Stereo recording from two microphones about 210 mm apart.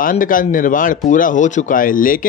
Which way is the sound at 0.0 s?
40° left (ahead or behind).